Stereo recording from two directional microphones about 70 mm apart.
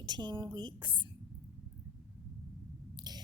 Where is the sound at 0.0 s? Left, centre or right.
Right.